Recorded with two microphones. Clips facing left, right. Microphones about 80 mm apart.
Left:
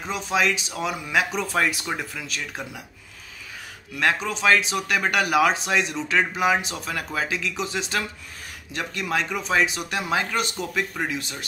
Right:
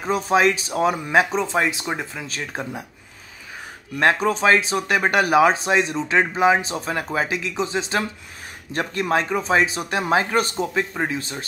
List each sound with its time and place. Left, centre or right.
0.0 s speech: right
4.0 s speech: right